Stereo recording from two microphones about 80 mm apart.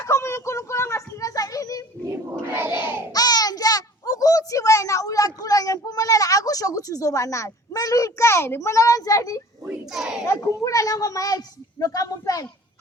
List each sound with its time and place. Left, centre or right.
0.0 s a sound: left
9.9 s speech: centre
10.6 s speech: left